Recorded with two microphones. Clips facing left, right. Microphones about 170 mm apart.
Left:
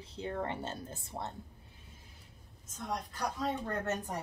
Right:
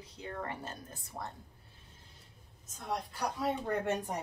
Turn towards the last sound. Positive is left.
turn(degrees=-15)  # may be behind; listen again after turning